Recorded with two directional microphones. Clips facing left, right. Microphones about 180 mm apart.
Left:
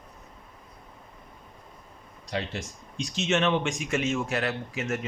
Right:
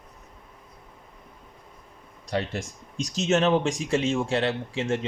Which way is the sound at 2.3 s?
45° right (ahead or behind).